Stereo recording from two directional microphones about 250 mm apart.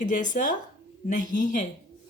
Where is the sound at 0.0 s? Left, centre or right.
Left.